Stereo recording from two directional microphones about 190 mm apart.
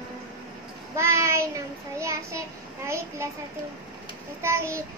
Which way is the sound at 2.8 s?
15° right (ahead or behind).